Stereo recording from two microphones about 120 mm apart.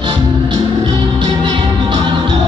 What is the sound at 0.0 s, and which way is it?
Music, 45° right (ahead or behind).